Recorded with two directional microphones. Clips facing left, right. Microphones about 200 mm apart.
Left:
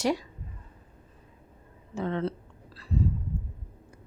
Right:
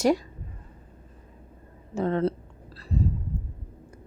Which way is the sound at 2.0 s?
40° right (ahead or behind).